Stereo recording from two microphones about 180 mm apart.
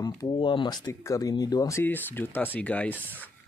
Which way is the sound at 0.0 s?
25° left (ahead or behind).